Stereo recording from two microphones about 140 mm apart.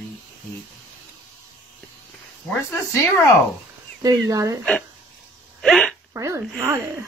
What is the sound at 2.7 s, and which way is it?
Speech, 20° left (ahead or behind).